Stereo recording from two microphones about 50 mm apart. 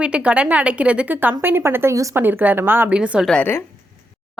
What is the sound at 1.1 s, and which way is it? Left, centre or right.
Speech, right.